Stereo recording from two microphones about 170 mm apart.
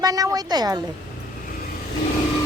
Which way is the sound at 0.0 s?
20° right (ahead or behind).